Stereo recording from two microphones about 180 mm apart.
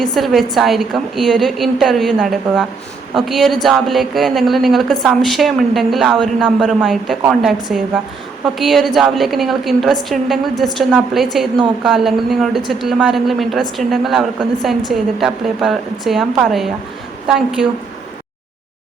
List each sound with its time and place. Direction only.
0.0 s a woman's voice: centre (ahead or behind)